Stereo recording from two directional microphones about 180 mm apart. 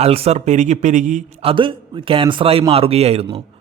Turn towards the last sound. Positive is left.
turn(degrees=-35)  # may be behind; listen again after turning